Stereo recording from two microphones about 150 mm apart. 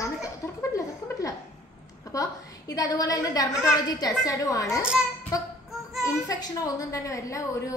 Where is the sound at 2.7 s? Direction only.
25° left (ahead or behind).